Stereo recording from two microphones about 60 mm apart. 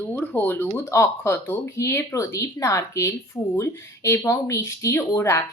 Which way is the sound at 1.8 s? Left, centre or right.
Left.